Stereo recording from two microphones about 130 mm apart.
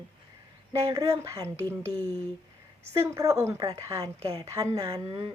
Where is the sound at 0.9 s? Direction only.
25° right (ahead or behind).